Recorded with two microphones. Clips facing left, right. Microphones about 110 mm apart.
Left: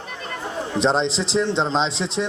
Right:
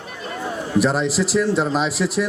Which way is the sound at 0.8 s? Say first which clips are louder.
Right 1 dB; 25° left (ahead or behind).